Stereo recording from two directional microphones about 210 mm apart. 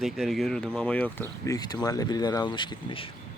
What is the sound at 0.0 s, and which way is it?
Speech, centre (ahead or behind).